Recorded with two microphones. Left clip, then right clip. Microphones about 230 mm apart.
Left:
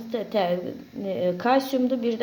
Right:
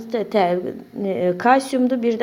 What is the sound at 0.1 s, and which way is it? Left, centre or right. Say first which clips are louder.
A woman's voice: right 6 dB; right.